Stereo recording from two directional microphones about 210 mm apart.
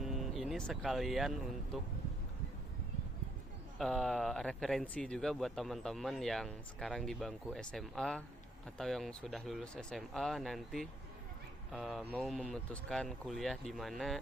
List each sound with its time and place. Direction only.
0.0 s speech: centre (ahead or behind)
3.8 s speech: centre (ahead or behind)